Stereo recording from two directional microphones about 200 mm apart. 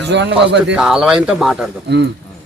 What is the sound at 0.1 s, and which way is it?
Speech, 60° right (ahead or behind).